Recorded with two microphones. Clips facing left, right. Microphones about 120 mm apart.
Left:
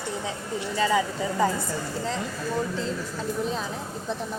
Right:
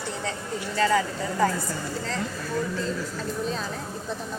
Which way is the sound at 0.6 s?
15° left (ahead or behind).